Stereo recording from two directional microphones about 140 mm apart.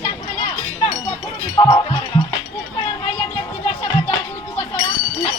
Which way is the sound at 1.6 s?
35° left (ahead or behind).